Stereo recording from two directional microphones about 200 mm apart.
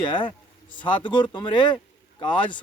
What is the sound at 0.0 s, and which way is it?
Speech, 25° left (ahead or behind).